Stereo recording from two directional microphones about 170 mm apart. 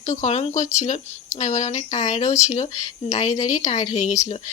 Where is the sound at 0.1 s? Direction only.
45° left (ahead or behind).